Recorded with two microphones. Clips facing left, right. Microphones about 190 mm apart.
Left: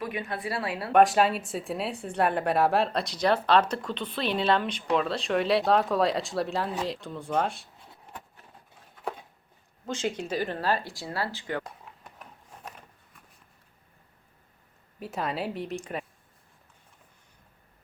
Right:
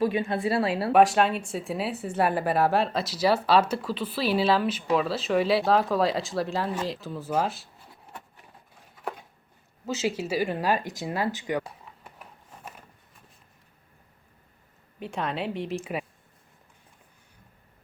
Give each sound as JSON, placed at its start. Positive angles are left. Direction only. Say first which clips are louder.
{"t": 0.0, "sound": "a woman's voice", "louder": "right 8 dB", "side_deg": -25}
{"t": 0.9, "sound": "speech", "louder": "even", "side_deg": 0}
{"t": 9.8, "sound": "speech", "louder": "right 3 dB", "side_deg": -5}
{"t": 14.9, "sound": "speech", "louder": "right 1 dB", "side_deg": 0}